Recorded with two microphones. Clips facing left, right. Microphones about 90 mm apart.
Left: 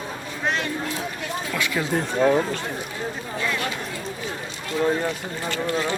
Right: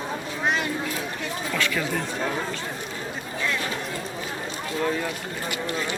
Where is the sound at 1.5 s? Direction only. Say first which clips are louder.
Even; 15° left (ahead or behind).